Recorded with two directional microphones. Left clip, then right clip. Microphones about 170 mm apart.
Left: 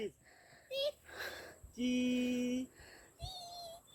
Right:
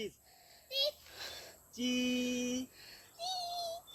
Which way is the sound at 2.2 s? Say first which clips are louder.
Right 1 dB; 40° left (ahead or behind).